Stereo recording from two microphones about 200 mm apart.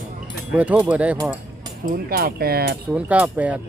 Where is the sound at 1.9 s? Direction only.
50° right (ahead or behind).